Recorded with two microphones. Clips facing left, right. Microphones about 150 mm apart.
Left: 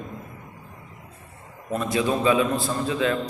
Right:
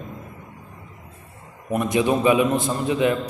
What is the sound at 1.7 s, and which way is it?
A man's voice, 15° right (ahead or behind).